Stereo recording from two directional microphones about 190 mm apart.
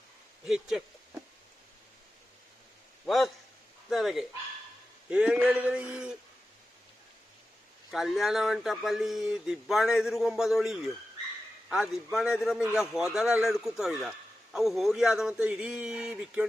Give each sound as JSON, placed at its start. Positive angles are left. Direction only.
{"t": 0.4, "sound": "speech", "side_deg": 0}
{"t": 3.1, "sound": "speech", "side_deg": 0}
{"t": 7.9, "sound": "speech", "side_deg": 0}